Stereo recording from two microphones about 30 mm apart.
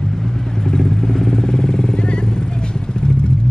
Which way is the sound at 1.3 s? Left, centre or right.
Left.